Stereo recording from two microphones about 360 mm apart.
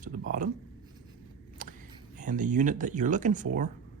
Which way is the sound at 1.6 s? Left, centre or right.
Right.